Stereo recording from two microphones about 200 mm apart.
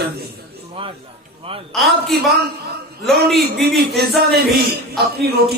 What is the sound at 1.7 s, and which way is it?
A man's voice, centre (ahead or behind).